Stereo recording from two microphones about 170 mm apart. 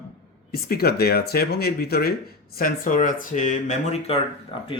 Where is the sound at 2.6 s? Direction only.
55° left (ahead or behind).